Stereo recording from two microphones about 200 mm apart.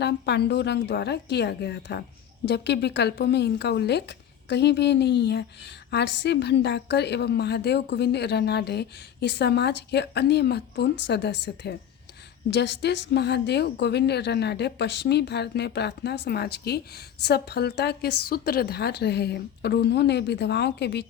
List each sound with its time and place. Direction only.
0.0 s speech: 55° left (ahead or behind)